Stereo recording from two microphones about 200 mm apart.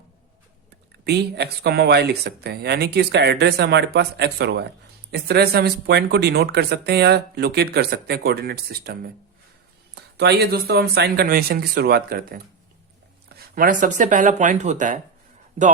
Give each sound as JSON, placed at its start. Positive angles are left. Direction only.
{"t": 1.0, "sound": "speech", "side_deg": -55}